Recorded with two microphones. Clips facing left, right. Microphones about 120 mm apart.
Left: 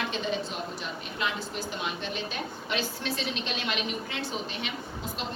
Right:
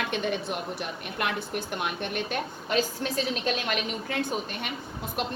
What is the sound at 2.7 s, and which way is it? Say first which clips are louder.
A woman's voice: right 5 dB; 45° right (ahead or behind).